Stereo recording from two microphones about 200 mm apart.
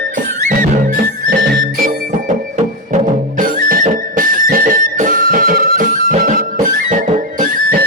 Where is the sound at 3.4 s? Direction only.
40° right (ahead or behind).